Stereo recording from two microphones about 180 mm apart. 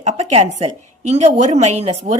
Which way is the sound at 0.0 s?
40° right (ahead or behind).